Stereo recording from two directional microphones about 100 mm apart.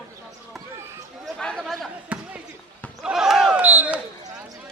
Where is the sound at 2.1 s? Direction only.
15° right (ahead or behind).